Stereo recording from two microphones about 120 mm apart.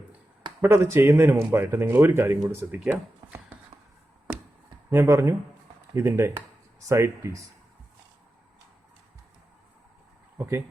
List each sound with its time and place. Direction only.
0.6 s a man's voice: 20° right (ahead or behind)
4.9 s a man's voice: 20° right (ahead or behind)
10.3 s speech: 20° right (ahead or behind)